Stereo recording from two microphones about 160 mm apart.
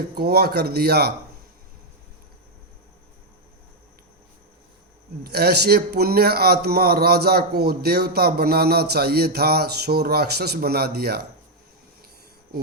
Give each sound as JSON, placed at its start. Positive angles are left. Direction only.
{"t": 0.2, "sound": "speech", "side_deg": -85}
{"t": 5.2, "sound": "a man's voice", "side_deg": -85}